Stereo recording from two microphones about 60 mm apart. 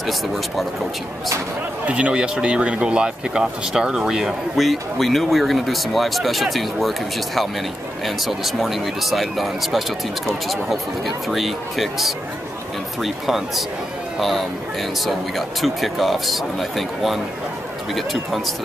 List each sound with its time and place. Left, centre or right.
0.0 s speech: centre
1.9 s speech: right; by 13.7 s centre
15.0 s speech: centre